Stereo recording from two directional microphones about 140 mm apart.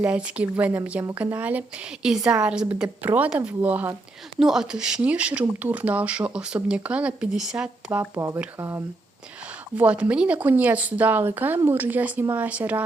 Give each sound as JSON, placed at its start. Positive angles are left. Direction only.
{"t": 0.0, "sound": "speech", "side_deg": -10}